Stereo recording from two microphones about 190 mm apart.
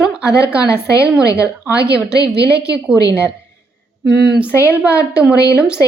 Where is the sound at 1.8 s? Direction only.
60° right (ahead or behind).